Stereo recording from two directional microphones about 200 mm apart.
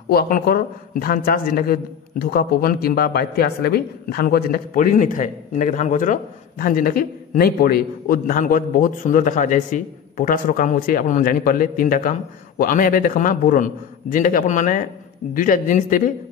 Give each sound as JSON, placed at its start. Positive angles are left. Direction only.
{"t": 0.1, "sound": "a man's voice", "side_deg": 50}